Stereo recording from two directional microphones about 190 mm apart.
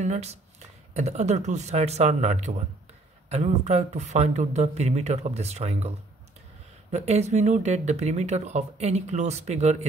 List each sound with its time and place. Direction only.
0.0 s speech: 35° right (ahead or behind)